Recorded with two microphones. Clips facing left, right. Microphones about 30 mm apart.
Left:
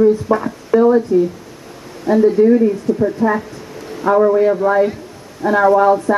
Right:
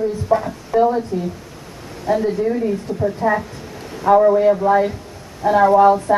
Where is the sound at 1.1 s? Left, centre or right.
Centre.